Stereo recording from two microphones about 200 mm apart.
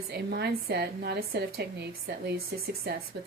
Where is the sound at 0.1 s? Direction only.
55° right (ahead or behind).